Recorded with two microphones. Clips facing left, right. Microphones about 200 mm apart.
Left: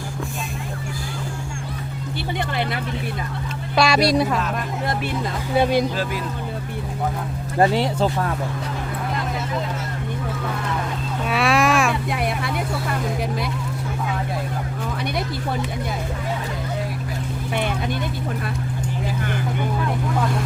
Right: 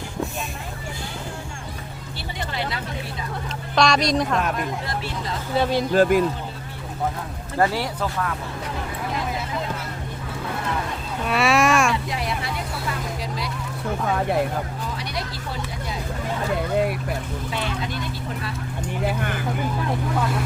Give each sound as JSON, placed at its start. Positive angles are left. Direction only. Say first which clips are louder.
{"t": 2.5, "sound": "vehicle", "louder": "left 4 dB", "side_deg": 55}
{"t": 3.8, "sound": "speech", "louder": "left 2 dB", "side_deg": 5}
{"t": 5.5, "sound": "speech", "louder": "left 3 dB", "side_deg": 15}
{"t": 5.9, "sound": "speech", "louder": "right 9 dB", "side_deg": -50}
{"t": 7.6, "sound": "speech", "louder": "left 4 dB", "side_deg": 20}
{"t": 11.3, "sound": "a sound", "louder": "even", "side_deg": 0}
{"t": 12.0, "sound": "vehicle", "louder": "left 3 dB", "side_deg": 55}
{"t": 14.9, "sound": "a sound", "louder": "left 7 dB", "side_deg": 55}
{"t": 17.5, "sound": "vehicle", "louder": "left 5 dB", "side_deg": 55}